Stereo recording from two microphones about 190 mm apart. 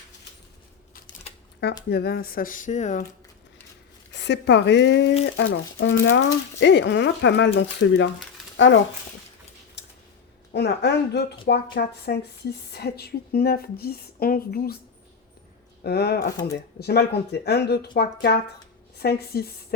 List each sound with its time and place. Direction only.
1.9 s speech: 55° left (ahead or behind); by 3.0 s 40° left (ahead or behind)
4.1 s speech: 65° left (ahead or behind)
8.5 s speech: 80° left
9.8 s a sound: 60° left (ahead or behind)
10.5 s speech: 60° left (ahead or behind)
15.8 s speech: 60° left (ahead or behind)